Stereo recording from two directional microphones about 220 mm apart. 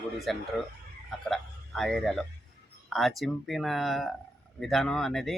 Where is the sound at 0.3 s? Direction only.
Centre (ahead or behind).